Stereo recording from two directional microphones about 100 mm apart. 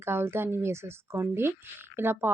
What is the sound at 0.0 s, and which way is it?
Speech, 25° right (ahead or behind).